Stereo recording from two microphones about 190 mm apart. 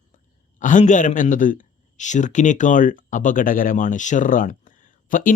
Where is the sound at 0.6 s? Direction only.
40° left (ahead or behind).